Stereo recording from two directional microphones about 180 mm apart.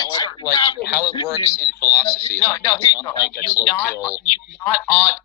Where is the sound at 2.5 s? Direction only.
20° left (ahead or behind).